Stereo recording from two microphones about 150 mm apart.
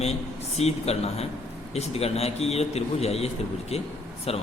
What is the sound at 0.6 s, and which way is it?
A man's voice, 45° left (ahead or behind).